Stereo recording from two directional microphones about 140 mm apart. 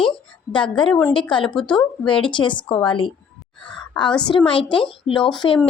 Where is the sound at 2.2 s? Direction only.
35° left (ahead or behind).